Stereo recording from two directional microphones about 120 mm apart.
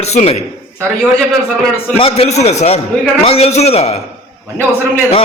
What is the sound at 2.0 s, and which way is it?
A man's voice, 55° left (ahead or behind).